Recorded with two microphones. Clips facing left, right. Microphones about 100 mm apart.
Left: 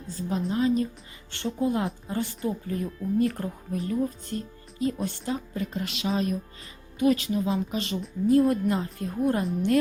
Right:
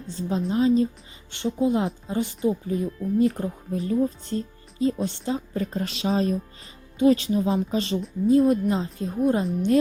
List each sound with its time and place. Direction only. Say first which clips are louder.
0.1 s speech: right 3 dB; 25° right (ahead or behind)
5.5 s speech: right 3 dB; 35° right (ahead or behind)
8.3 s speech: right 2 dB; 20° right (ahead or behind)